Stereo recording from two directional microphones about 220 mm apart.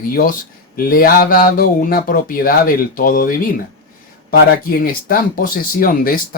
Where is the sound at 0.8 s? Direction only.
40° left (ahead or behind).